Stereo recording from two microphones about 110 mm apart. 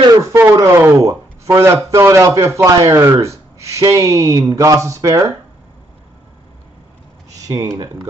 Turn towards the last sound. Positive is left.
turn(degrees=-30)  # may be behind; listen again after turning